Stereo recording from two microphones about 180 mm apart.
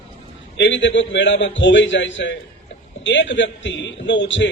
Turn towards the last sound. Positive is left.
turn(degrees=90)